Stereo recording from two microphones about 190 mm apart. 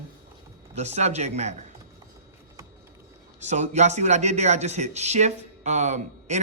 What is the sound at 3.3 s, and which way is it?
Speech, 35° right (ahead or behind).